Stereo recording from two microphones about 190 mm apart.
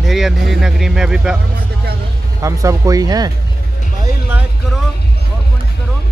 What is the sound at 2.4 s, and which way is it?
Speech, 15° right (ahead or behind).